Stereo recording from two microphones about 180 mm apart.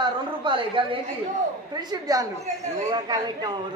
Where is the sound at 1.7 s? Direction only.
20° right (ahead or behind).